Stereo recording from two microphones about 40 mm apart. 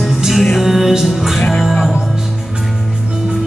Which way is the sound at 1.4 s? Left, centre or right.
Left.